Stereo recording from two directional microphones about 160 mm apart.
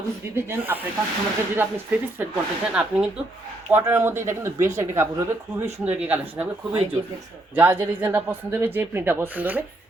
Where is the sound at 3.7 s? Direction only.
15° right (ahead or behind).